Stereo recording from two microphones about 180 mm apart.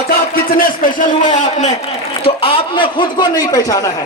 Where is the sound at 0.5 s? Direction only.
50° left (ahead or behind).